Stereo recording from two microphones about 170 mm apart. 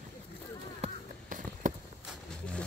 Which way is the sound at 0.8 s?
50° right (ahead or behind).